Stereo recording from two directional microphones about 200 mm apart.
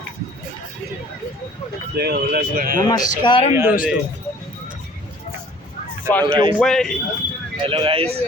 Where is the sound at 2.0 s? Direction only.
55° right (ahead or behind).